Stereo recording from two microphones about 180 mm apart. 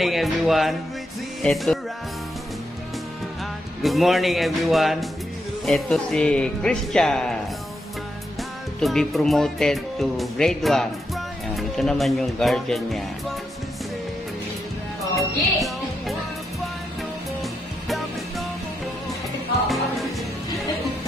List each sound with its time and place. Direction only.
0.0 s speech: centre (ahead or behind)
1.4 s music: centre (ahead or behind)
3.8 s speech: centre (ahead or behind)
8.7 s speech: centre (ahead or behind)
15.1 s music: centre (ahead or behind)
17.4 s music: centre (ahead or behind)